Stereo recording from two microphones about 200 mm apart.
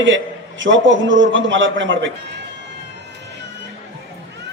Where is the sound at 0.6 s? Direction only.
70° right (ahead or behind).